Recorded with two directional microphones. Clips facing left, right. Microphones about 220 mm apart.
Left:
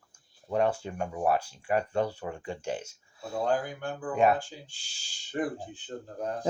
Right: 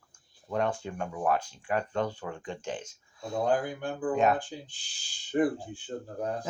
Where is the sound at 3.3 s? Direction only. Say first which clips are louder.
Right 1 dB; 15° right (ahead or behind).